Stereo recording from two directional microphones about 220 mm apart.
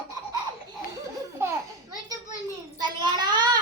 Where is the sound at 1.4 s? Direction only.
10° right (ahead or behind).